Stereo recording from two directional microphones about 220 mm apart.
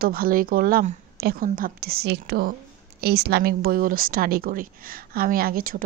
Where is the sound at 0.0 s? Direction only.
40° right (ahead or behind).